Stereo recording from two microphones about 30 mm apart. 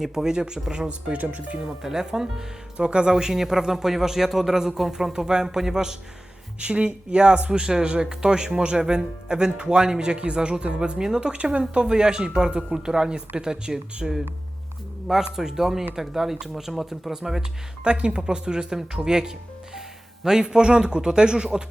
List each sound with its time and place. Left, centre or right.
0.0 s speech: centre
1.1 s speech: right
1.5 s speech: right
1.8 s speech: centre
2.7 s speech: right; by 4.5 s centre
4.5 s speech: centre
6.6 s speech: right
10.2 s speech: right
10.8 s speech: right
15.4 s speech: centre
17.8 s speech: right